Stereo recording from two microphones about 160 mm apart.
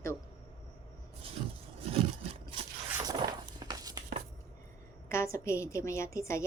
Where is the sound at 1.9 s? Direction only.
35° right (ahead or behind).